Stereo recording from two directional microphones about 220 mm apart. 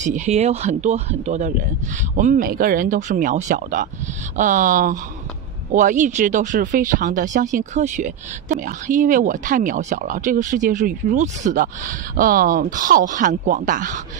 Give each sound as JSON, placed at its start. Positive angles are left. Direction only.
{"t": 0.0, "sound": "speech", "side_deg": -35}